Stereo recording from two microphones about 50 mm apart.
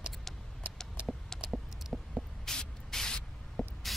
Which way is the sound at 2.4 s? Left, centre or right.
Centre.